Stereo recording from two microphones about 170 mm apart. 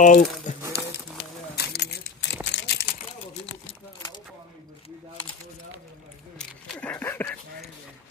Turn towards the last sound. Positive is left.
turn(degrees=10)  # may be behind; listen again after turning